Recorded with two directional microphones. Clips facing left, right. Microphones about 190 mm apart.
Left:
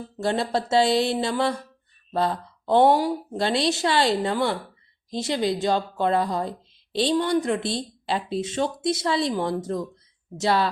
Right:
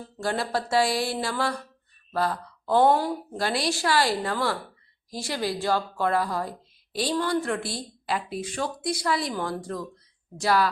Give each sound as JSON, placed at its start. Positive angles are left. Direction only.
{"t": 0.2, "sound": "speech", "side_deg": 25}